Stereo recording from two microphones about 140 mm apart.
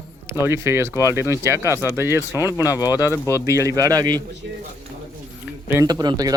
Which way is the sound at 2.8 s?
25° left (ahead or behind).